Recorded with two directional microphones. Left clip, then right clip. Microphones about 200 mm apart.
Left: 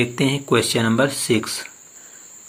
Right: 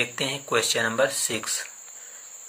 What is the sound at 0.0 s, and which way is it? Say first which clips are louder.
Speech: left 6 dB; 15° left (ahead or behind).